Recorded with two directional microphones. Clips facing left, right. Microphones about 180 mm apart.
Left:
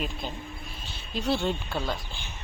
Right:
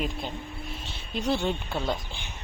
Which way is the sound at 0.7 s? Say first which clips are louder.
Right 2 dB; 25° right (ahead or behind).